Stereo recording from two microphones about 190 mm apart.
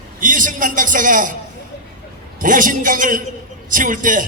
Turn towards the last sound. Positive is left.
turn(degrees=-45)  # may be behind; listen again after turning